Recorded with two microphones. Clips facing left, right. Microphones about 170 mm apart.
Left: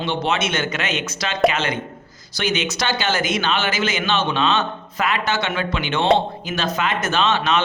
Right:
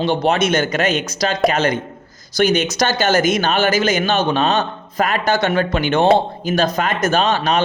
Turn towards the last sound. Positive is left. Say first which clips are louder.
# right 3 dB
turn(degrees=-40)  # may be behind; listen again after turning